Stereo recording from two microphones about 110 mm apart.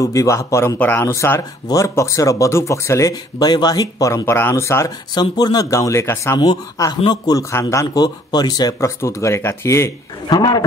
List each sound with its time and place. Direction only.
0.0 s speech: 30° left (ahead or behind)
5.1 s speech: 40° left (ahead or behind)
6.4 s speech: 40° left (ahead or behind)
10.2 s speech: 35° left (ahead or behind)